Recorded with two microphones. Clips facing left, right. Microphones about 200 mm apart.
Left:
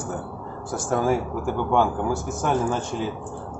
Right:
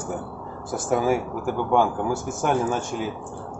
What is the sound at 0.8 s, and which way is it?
Speech, 5° right (ahead or behind).